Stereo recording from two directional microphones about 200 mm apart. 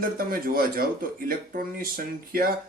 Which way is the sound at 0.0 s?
45° right (ahead or behind).